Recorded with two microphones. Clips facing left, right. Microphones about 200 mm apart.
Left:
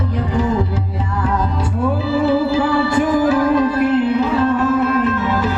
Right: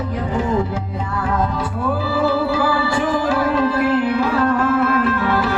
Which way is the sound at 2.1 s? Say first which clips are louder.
Left 4 dB; 25° left (ahead or behind).